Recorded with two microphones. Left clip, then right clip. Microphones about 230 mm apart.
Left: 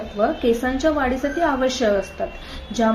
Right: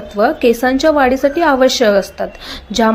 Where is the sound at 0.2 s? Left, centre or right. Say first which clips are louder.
Right 8 dB; right.